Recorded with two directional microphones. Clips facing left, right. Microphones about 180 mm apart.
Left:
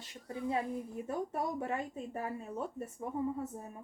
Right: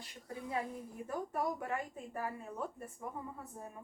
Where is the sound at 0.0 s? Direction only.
25° left (ahead or behind).